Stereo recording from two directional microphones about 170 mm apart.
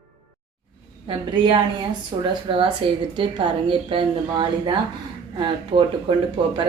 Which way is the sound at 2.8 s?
30° right (ahead or behind).